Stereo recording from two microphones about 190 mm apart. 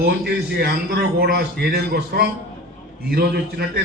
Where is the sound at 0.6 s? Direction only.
55° right (ahead or behind).